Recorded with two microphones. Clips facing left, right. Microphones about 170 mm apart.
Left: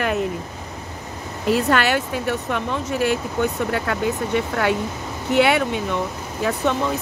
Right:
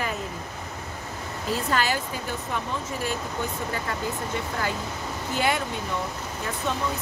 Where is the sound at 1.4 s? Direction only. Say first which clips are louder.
Left 7 dB; 70° left (ahead or behind).